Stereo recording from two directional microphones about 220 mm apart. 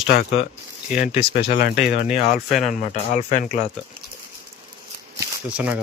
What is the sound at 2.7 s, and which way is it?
Speech, 35° left (ahead or behind).